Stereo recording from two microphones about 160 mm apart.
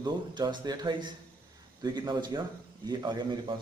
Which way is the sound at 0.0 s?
25° right (ahead or behind).